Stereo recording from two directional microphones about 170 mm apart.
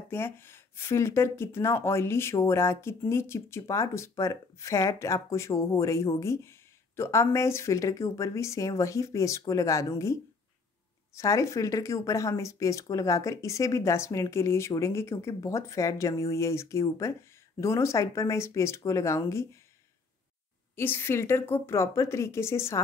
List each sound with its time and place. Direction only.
0.1 s speech: 15° left (ahead or behind)
11.1 s speech: 20° left (ahead or behind)
20.7 s speech: 15° left (ahead or behind)